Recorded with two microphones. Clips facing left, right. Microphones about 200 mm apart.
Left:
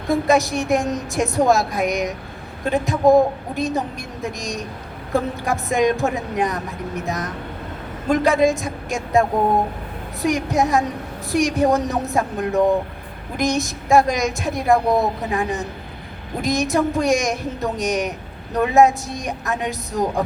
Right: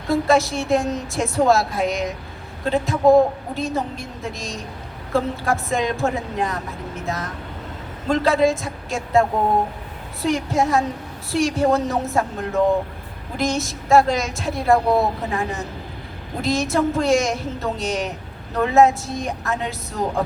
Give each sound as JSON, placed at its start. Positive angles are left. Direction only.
{"t": 0.1, "sound": "a woman's voice", "side_deg": 15}
{"t": 10.2, "sound": "a woman's voice", "side_deg": 15}